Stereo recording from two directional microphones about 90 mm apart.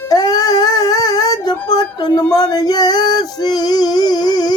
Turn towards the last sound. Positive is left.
turn(degrees=50)  # may be behind; listen again after turning